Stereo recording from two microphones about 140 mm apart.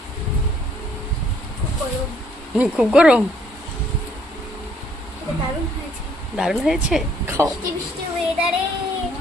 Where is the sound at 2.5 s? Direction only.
5° right (ahead or behind).